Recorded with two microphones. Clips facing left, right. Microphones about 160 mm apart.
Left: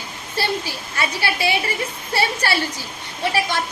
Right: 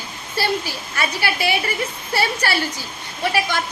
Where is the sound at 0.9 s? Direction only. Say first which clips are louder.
Even; 25° left (ahead or behind).